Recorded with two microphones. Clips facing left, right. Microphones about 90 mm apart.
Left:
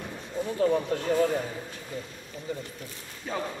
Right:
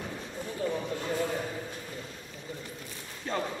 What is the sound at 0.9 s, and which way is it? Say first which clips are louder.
Speech: left 5 dB; 70° left (ahead or behind).